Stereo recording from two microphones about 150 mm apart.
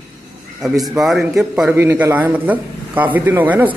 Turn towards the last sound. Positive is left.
turn(degrees=-10)  # may be behind; listen again after turning